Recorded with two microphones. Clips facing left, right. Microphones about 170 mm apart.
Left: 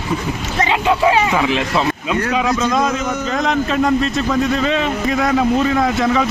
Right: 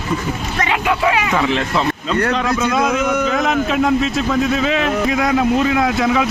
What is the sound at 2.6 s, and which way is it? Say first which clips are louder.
Speech: right 1 dB; 5° right (ahead or behind).